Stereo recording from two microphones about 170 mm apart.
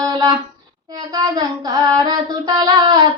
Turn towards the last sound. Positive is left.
turn(degrees=-25)  # may be behind; listen again after turning